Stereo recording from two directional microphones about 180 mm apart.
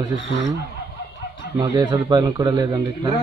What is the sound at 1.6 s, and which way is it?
A man's voice, 15° right (ahead or behind).